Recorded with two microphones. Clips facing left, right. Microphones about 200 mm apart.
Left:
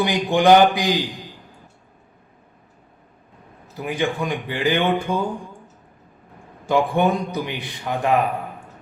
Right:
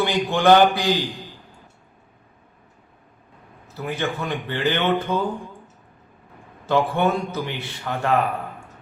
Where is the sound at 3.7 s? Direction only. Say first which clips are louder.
Left 3 dB; 15° left (ahead or behind).